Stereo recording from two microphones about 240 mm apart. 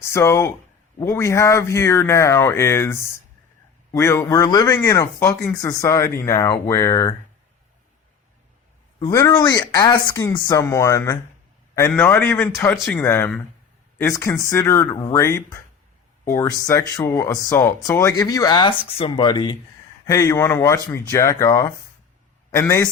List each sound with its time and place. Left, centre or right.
0.0 s speech: centre
9.0 s speech: centre
12.7 s speech: centre